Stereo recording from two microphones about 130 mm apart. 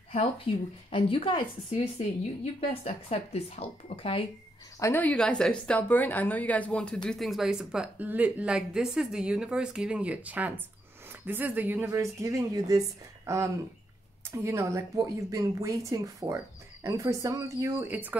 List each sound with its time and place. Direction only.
0.1 s a woman's voice: 45° left (ahead or behind)
4.7 s speech: 25° left (ahead or behind)
5.0 s a woman's voice: 10° left (ahead or behind); by 18.1 s 15° right (ahead or behind)